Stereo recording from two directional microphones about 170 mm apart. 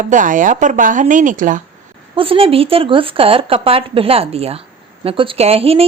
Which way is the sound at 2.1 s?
35° right (ahead or behind).